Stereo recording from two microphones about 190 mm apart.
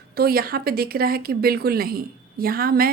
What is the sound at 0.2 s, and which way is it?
A woman's voice, 50° right (ahead or behind).